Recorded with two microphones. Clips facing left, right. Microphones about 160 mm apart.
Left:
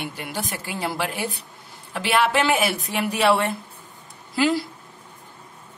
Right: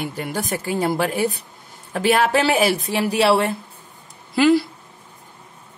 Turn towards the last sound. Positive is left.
turn(degrees=-65)  # may be behind; listen again after turning